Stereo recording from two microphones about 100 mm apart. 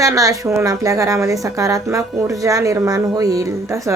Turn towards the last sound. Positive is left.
turn(degrees=-30)  # may be behind; listen again after turning